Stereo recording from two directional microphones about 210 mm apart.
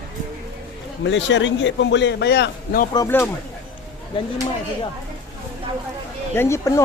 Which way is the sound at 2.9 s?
15° left (ahead or behind).